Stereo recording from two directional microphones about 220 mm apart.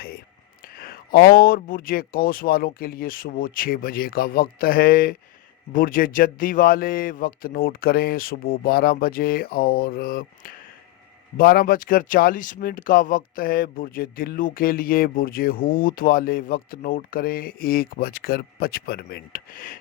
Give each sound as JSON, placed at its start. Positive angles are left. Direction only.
{"t": 0.6, "sound": "speech", "side_deg": 45}